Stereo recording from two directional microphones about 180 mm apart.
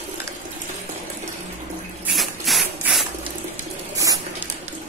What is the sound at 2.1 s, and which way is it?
Rub, centre (ahead or behind).